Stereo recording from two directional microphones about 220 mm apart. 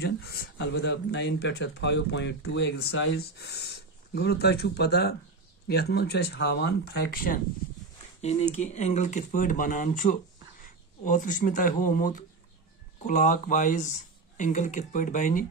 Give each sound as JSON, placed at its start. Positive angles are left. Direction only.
{"t": 0.0, "sound": "speech", "side_deg": 45}
{"t": 8.2, "sound": "speech", "side_deg": 30}